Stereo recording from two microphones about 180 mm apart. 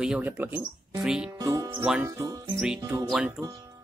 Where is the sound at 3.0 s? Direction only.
5° right (ahead or behind).